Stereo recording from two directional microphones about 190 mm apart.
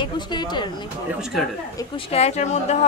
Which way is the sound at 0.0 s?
25° left (ahead or behind).